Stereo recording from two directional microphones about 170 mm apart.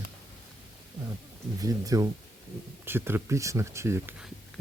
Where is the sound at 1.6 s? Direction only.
20° right (ahead or behind).